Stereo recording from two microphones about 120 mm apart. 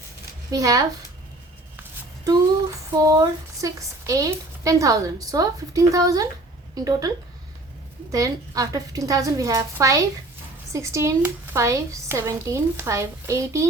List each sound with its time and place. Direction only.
0.5 s speech: 30° right (ahead or behind)
2.2 s a sound: 30° right (ahead or behind)
8.1 s speech: 30° right (ahead or behind)